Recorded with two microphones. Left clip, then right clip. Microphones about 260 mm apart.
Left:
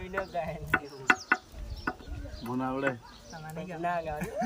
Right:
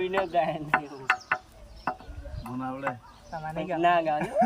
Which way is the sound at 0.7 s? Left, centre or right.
Centre.